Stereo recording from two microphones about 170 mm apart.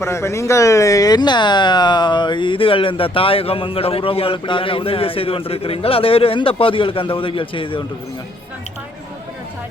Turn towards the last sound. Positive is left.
turn(degrees=30)  # may be behind; listen again after turning